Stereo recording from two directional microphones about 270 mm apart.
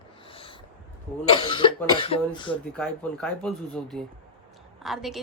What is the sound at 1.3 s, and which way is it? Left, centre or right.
A woman's voice, centre.